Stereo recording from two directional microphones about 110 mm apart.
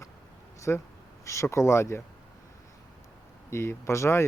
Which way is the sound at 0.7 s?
20° left (ahead or behind).